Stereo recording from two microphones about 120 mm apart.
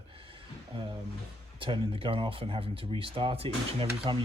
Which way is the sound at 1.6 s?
45° right (ahead or behind).